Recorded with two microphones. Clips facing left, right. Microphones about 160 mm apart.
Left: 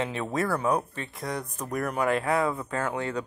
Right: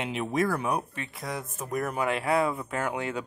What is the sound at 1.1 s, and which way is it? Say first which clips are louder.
Speech: left 3 dB; centre (ahead or behind).